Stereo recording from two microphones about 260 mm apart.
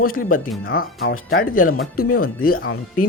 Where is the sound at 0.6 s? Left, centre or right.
Left.